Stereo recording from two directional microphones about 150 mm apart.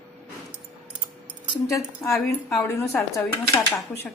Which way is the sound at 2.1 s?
5° left (ahead or behind).